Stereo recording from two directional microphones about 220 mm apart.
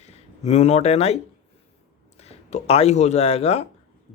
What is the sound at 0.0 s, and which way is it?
Speech, 30° left (ahead or behind).